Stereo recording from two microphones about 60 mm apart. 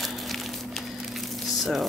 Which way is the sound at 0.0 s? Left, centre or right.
Centre.